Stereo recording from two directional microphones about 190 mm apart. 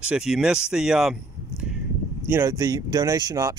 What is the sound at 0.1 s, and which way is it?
Speech, 5° right (ahead or behind).